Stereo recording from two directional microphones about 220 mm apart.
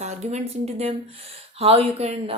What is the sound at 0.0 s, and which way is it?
Speech, 30° right (ahead or behind).